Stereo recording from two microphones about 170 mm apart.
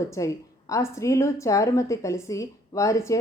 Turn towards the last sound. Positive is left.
turn(degrees=20)  # may be behind; listen again after turning